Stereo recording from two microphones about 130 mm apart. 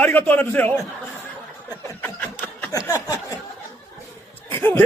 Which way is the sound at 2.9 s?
25° left (ahead or behind).